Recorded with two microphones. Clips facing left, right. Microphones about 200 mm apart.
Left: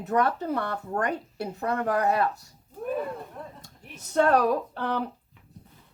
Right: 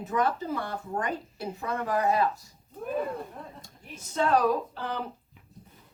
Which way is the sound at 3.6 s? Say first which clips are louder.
Right 1 dB; 65° left (ahead or behind).